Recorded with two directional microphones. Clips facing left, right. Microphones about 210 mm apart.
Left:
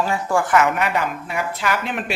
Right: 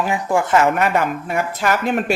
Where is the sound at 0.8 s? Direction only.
45° right (ahead or behind).